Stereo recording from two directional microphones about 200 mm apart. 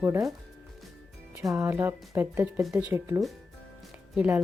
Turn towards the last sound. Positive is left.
turn(degrees=-10)  # may be behind; listen again after turning